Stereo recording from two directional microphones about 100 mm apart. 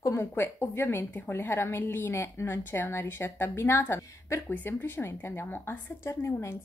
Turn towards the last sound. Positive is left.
turn(degrees=25)  # may be behind; listen again after turning